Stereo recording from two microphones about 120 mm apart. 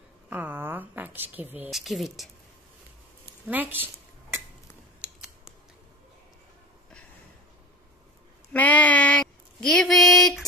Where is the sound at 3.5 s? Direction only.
15° right (ahead or behind).